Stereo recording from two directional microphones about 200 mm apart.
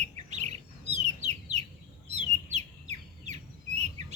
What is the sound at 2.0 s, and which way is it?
Bird, 35° right (ahead or behind).